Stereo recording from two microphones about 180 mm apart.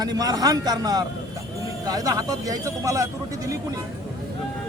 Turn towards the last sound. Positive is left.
turn(degrees=-20)  # may be behind; listen again after turning